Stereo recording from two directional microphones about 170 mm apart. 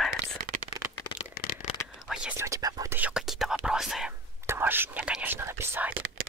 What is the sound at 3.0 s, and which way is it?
Whispering, 5° right (ahead or behind).